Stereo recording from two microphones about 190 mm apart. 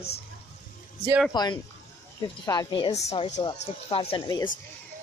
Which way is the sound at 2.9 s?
35° left (ahead or behind).